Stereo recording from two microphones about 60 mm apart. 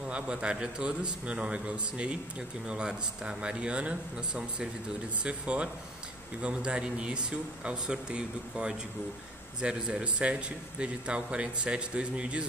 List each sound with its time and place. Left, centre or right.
0.1 s a man's voice: centre